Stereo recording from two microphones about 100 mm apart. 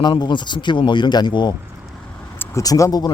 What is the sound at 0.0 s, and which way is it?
Speech, 50° left (ahead or behind).